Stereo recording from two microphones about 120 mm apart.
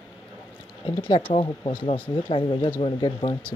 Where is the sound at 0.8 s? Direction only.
45° left (ahead or behind).